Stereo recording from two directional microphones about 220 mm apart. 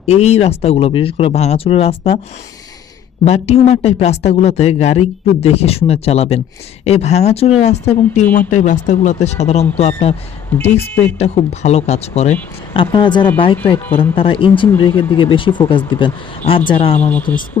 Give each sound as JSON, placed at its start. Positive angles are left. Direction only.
{"t": 0.0, "sound": "speech", "side_deg": 30}
{"t": 3.2, "sound": "speech", "side_deg": 30}
{"t": 10.8, "sound": "speech", "side_deg": 10}
{"t": 11.2, "sound": "speech", "side_deg": 30}
{"t": 17.0, "sound": "speech", "side_deg": 5}